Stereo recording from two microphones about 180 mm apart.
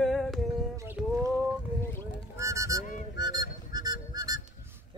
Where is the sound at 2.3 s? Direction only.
15° right (ahead or behind).